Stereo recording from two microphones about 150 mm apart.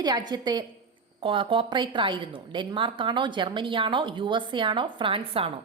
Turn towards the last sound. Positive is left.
turn(degrees=-35)  # may be behind; listen again after turning